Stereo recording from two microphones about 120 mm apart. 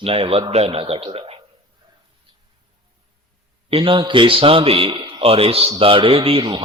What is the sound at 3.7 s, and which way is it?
A man's voice, 45° right (ahead or behind).